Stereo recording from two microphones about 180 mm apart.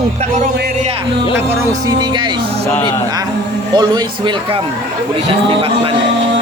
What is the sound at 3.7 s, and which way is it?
Speech, 25° right (ahead or behind).